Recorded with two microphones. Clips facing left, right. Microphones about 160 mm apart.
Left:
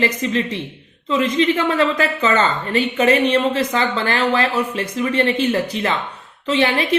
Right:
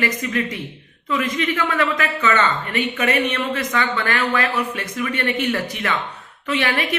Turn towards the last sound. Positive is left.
turn(degrees=30)  # may be behind; listen again after turning